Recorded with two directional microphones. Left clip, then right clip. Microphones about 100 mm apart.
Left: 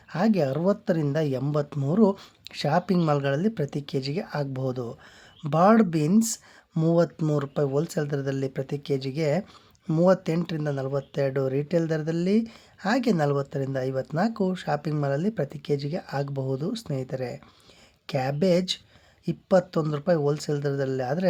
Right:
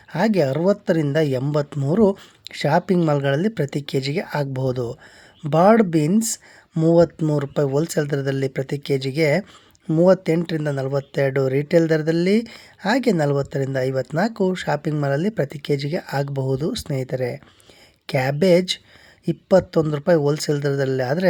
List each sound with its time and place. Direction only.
0.1 s speech: 30° right (ahead or behind)
6.8 s speech: 15° right (ahead or behind)
7.3 s speech: 35° right (ahead or behind)
9.8 s speech: 20° right (ahead or behind)
10.4 s a woman's voice: 35° right (ahead or behind)